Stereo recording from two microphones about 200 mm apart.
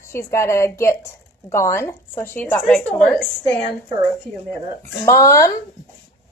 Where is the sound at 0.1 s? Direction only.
15° left (ahead or behind).